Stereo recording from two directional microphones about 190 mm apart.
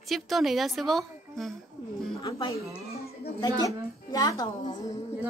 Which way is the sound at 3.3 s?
20° left (ahead or behind).